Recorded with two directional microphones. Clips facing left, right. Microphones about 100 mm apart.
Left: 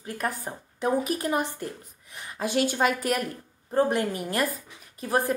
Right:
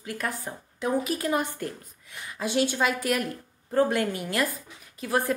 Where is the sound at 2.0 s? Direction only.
35° left (ahead or behind).